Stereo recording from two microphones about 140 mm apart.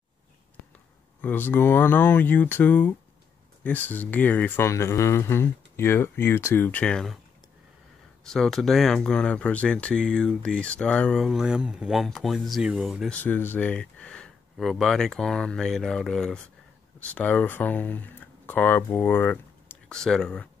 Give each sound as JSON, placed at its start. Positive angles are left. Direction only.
{"t": 1.2, "sound": "speech", "side_deg": 15}
{"t": 8.2, "sound": "speech", "side_deg": 5}
{"t": 13.1, "sound": "speech", "side_deg": 15}